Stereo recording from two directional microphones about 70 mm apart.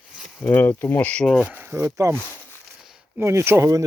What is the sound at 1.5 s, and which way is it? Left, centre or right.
Speech, right.